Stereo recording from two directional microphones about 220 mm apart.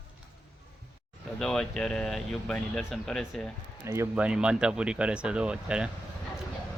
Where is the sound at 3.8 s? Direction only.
10° right (ahead or behind).